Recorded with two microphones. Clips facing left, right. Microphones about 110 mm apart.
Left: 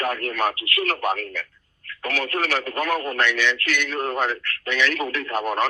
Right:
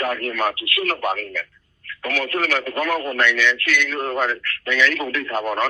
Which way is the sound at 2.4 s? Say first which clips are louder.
Right 2 dB; 30° left (ahead or behind).